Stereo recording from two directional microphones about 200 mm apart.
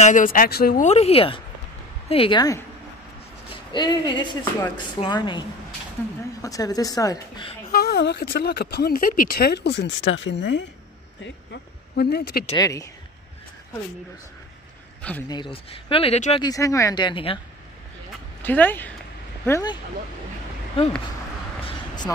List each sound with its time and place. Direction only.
0.0 s speech: 40° left (ahead or behind)
0.8 s speech: 30° left (ahead or behind)
3.7 s speech: 20° left (ahead or behind)
6.0 s a woman's voice: 10° left (ahead or behind)
7.7 s speech: 50° left (ahead or behind)
12.0 s speech: 55° left (ahead or behind)
12.5 s a woman's voice: 15° left (ahead or behind)
15.0 s speech: 5° left (ahead or behind)
15.2 s speech: 25° left (ahead or behind)
16.4 s speech: 15° left (ahead or behind)
18.4 s a woman's voice: 10° left (ahead or behind)
21.6 s a sound: 20° left (ahead or behind)